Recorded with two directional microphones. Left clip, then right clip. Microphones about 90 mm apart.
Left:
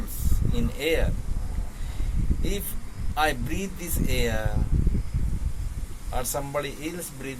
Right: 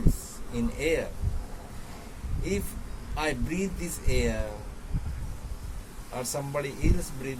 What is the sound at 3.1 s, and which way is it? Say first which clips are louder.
Speech: left 5 dB; 20° right (ahead or behind).